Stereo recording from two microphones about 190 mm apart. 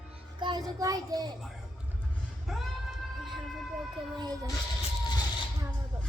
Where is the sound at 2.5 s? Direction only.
Centre (ahead or behind).